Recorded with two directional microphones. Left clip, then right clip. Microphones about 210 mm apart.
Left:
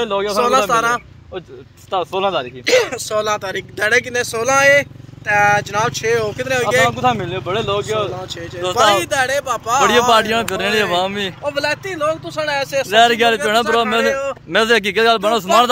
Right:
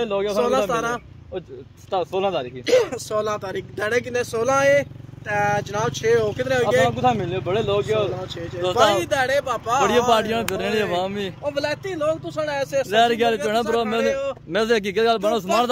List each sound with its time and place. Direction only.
0.0 s speech: centre (ahead or behind)
0.7 s speech: 15° right (ahead or behind)
1.9 s speech: centre (ahead or behind)
2.6 s speech: 20° right (ahead or behind)
6.8 s speech: centre (ahead or behind)
9.0 s speech: 10° right (ahead or behind)
9.8 s speech: 5° left (ahead or behind)
11.4 s speech: 10° right (ahead or behind)
12.9 s speech: 5° left (ahead or behind)